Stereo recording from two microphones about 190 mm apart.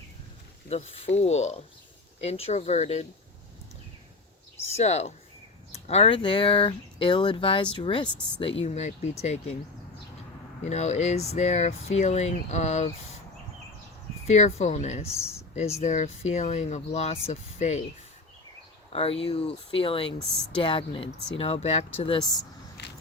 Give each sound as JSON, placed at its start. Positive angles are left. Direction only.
{"t": 0.7, "sound": "speech", "side_deg": 35}
{"t": 4.8, "sound": "speech", "side_deg": 35}
{"t": 8.6, "sound": "speech", "side_deg": 40}
{"t": 10.6, "sound": "speech", "side_deg": 35}
{"t": 14.3, "sound": "speech", "side_deg": 35}
{"t": 18.9, "sound": "speech", "side_deg": 30}
{"t": 22.2, "sound": "speech", "side_deg": 0}